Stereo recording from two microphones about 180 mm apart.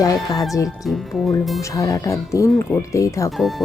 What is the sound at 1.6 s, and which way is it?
Speech, 20° left (ahead or behind).